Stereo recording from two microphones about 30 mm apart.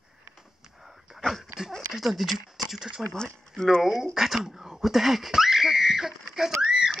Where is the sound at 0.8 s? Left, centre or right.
Centre.